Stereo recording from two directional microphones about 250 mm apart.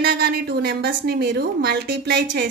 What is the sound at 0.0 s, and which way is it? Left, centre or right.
A woman's voice, right.